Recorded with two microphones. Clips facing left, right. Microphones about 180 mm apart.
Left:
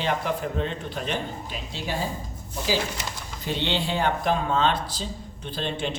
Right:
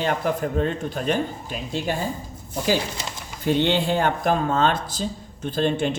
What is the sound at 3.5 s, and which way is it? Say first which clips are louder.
Speech: right 7 dB; 50° right (ahead or behind).